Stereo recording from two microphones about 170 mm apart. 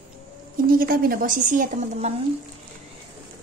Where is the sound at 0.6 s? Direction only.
55° right (ahead or behind).